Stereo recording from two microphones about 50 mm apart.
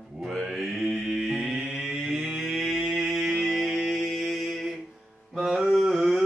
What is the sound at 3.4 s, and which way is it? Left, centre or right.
Music, centre.